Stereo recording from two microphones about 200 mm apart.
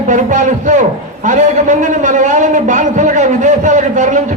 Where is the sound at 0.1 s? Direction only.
40° right (ahead or behind).